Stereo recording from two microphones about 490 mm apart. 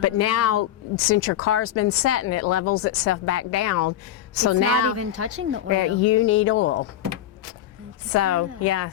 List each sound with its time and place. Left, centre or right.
0.0 s speech: left
4.9 s speech: right
5.6 s speech: left
8.1 s speech: left